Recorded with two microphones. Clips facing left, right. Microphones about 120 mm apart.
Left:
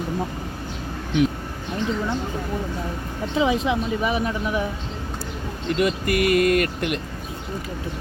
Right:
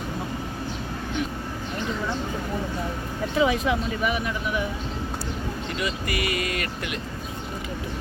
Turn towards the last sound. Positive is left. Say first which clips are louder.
# left 9 dB
turn(degrees=55)  # may be behind; listen again after turning